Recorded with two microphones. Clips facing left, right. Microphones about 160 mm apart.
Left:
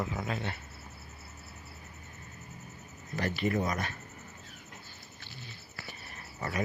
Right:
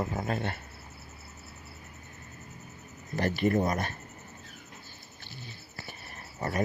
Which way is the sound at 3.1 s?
50° right (ahead or behind).